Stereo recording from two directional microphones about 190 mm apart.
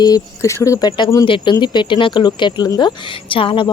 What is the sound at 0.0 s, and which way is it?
Speech, 20° left (ahead or behind).